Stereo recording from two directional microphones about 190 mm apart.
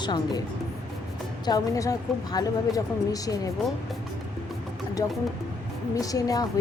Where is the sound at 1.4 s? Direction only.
20° left (ahead or behind).